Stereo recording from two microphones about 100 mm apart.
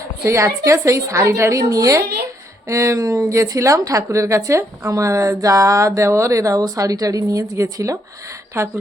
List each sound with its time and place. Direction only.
0.3 s a woman's voice: 30° right (ahead or behind)